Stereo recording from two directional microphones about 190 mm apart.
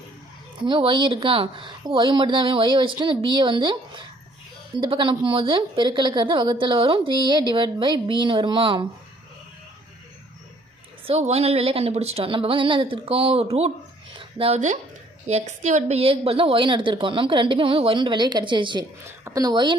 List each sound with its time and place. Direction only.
0.6 s a woman's voice: 25° right (ahead or behind)
11.0 s a woman's voice: 35° right (ahead or behind)